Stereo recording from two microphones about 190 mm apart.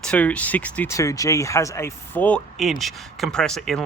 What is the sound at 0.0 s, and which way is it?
Speech, 5° left (ahead or behind).